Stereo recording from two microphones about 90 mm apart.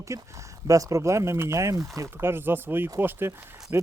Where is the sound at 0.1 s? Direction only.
35° right (ahead or behind).